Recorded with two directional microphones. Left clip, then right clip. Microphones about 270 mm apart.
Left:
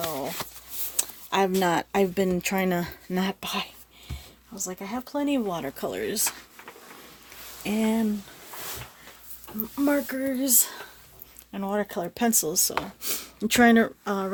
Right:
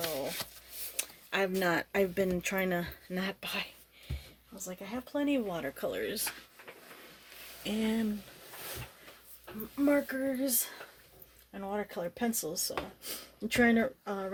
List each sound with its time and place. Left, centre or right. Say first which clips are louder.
0.9 s speech: left 8 dB; left
7.6 s speech: left 7 dB; left
9.7 s speech: left 4 dB; left